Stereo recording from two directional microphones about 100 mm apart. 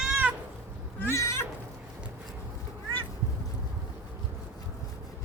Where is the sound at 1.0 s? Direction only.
25° left (ahead or behind).